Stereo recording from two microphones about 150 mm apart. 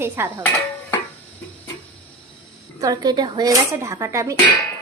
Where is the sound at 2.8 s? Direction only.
25° right (ahead or behind).